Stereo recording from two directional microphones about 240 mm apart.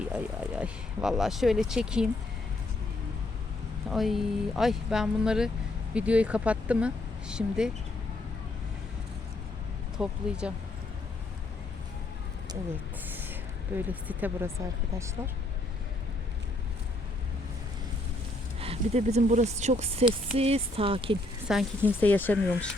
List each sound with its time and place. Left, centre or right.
0.0 s speech: centre
3.8 s speech: centre
10.0 s speech: centre
13.1 s a sound: centre
13.7 s speech: centre
18.6 s speech: right
21.4 s speech: centre